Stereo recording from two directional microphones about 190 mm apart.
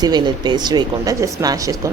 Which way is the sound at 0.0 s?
20° right (ahead or behind).